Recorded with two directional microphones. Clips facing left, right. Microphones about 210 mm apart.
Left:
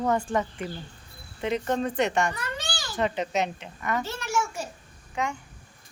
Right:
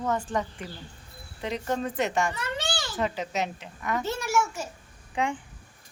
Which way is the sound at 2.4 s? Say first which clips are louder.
Right 3 dB; 25° right (ahead or behind).